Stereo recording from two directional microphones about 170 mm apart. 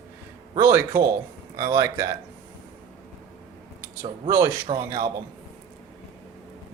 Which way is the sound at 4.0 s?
20° right (ahead or behind).